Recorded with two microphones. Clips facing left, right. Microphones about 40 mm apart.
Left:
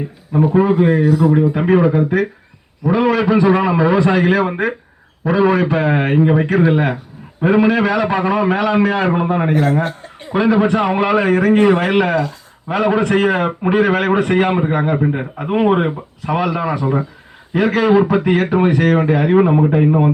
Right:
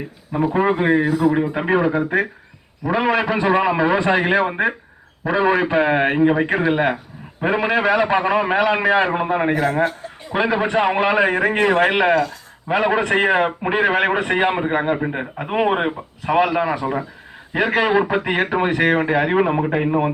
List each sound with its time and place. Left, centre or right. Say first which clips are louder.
0.6 s a man's voice: left 1 dB; right
1.5 s a man's voice: left 4 dB; centre
9.0 s a man's voice: left 3 dB; centre
9.5 s a man's voice: left 3 dB; right
10.3 s a man's voice: left 4 dB; centre
11.8 s a man's voice: even; centre
16.6 s a man's voice: left 3 dB; centre
17.5 s a man's voice: left 4 dB; right